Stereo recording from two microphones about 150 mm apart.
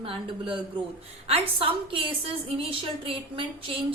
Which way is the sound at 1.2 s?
40° right (ahead or behind).